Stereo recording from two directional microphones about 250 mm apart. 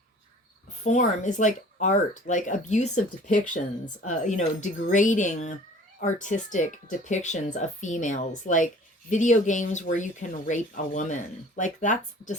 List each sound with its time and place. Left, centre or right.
0.9 s speech: left